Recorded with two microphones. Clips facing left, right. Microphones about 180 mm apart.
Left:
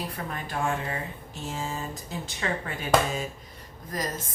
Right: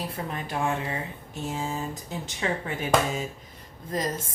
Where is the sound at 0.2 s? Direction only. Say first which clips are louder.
Right 2 dB; 20° right (ahead or behind).